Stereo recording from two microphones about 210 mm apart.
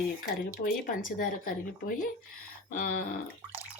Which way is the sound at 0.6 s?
40° left (ahead or behind).